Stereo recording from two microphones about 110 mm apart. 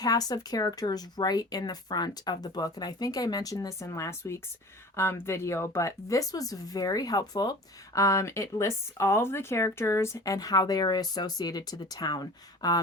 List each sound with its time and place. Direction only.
0.0 s speech: 35° left (ahead or behind)